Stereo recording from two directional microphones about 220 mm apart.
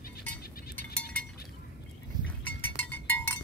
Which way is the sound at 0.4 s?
45° left (ahead or behind).